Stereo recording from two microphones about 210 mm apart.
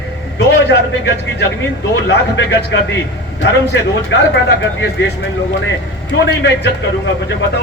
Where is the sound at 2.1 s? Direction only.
55° left (ahead or behind).